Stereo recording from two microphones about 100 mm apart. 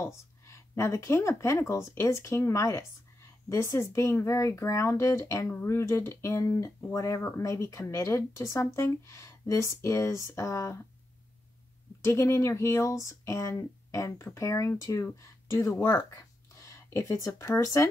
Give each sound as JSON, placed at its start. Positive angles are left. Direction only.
{"t": 0.0, "sound": "speech", "side_deg": 30}
{"t": 12.0, "sound": "speech", "side_deg": 30}